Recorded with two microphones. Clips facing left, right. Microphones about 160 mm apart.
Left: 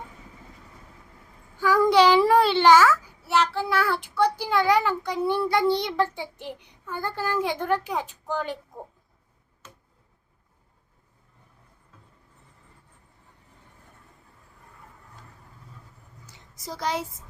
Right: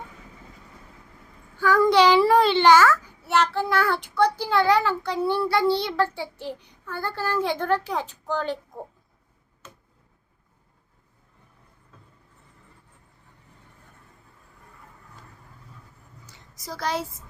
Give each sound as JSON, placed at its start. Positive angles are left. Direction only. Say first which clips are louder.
{"t": 1.5, "sound": "a child's voice", "louder": "even", "side_deg": 15}
{"t": 16.6, "sound": "a woman's voice", "louder": "right 1 dB", "side_deg": 20}